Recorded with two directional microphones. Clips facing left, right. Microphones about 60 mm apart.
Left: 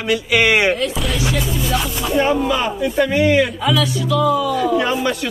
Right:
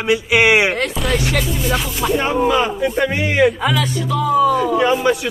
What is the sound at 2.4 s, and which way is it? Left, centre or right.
Speech, right.